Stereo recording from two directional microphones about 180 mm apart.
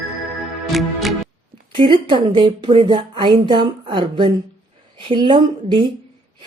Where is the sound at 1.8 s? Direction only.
25° right (ahead or behind).